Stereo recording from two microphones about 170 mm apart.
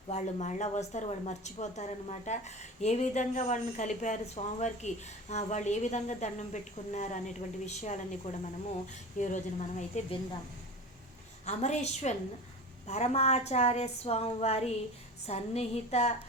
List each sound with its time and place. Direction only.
0.1 s speech: 45° left (ahead or behind)
11.4 s a woman's voice: 40° left (ahead or behind)